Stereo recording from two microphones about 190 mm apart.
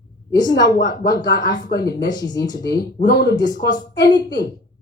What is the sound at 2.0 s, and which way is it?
Speech, 20° left (ahead or behind).